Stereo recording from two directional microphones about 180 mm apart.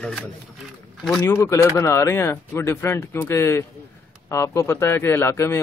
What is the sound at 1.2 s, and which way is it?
Speech, 15° left (ahead or behind).